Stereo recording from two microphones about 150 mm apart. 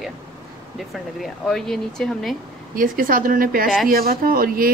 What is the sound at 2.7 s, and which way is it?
Speech, 70° right (ahead or behind).